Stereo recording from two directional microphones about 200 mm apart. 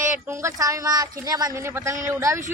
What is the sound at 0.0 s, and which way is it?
Speech, 15° right (ahead or behind).